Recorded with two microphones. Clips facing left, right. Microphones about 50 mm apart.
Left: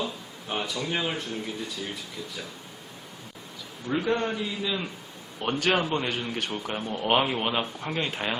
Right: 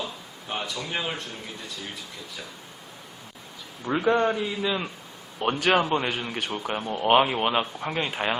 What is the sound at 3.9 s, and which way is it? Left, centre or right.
Speech, centre.